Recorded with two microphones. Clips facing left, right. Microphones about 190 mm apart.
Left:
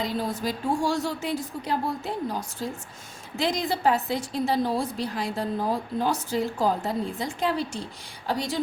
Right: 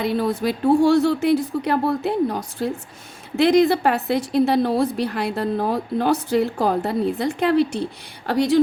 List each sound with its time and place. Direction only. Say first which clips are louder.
0.0 s a woman's voice: right 7 dB; 65° right (ahead or behind)